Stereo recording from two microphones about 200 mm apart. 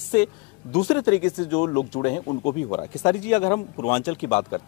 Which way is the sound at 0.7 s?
20° left (ahead or behind).